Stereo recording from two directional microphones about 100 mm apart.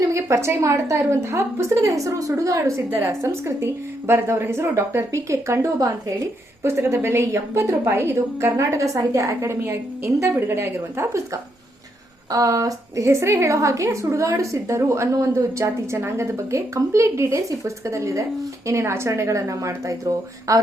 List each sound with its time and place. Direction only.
0.1 s a woman's voice: 30° right (ahead or behind)